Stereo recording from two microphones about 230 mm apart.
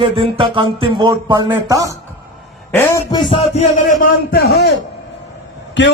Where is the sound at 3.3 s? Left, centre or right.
Left.